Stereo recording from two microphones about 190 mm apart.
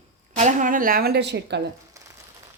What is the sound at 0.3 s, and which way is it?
Speech, 40° right (ahead or behind).